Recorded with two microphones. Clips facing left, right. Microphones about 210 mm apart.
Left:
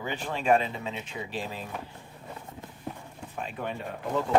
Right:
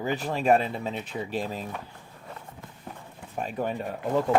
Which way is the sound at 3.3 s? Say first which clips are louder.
Right 5 dB; 40° right (ahead or behind).